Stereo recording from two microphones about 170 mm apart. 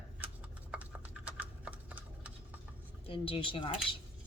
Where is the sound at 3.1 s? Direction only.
30° left (ahead or behind).